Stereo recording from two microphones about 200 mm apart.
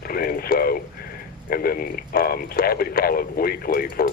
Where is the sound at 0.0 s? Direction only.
50° left (ahead or behind).